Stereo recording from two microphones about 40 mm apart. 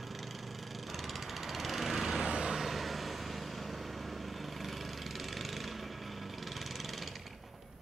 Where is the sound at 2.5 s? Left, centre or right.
Centre.